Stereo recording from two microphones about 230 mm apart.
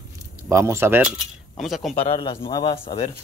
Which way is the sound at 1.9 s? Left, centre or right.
Left.